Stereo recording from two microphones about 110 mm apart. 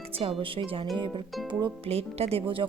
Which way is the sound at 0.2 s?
55° right (ahead or behind).